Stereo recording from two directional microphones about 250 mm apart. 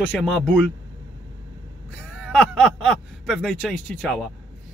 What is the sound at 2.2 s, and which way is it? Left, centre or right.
Speech, centre.